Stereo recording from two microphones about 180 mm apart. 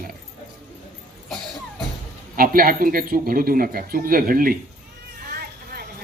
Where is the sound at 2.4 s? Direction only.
55° right (ahead or behind).